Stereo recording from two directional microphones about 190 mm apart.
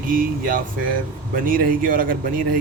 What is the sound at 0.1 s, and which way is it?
Speech, 45° right (ahead or behind).